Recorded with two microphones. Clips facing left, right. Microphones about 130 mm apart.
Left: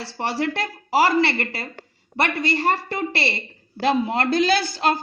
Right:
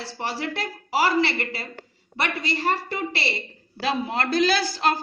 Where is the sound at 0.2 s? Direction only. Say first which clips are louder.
Left 5 dB; 45° left (ahead or behind).